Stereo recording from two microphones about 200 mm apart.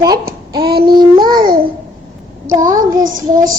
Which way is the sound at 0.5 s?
20° right (ahead or behind).